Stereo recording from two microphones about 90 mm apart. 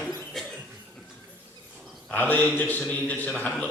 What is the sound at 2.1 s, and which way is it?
A man's voice, 15° left (ahead or behind).